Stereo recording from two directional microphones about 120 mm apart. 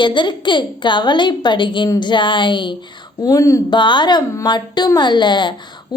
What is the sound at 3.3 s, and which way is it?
Speech, 25° left (ahead or behind).